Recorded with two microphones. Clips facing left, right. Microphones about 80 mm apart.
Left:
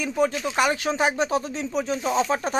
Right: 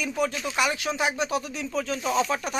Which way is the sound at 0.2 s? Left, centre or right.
Left.